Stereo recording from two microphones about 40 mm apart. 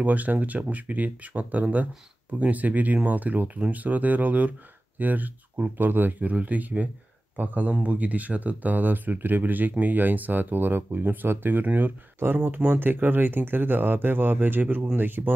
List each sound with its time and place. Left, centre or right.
0.0 s speech: right
6.2 s speech: right
12.4 s speech: right
12.6 s speech: right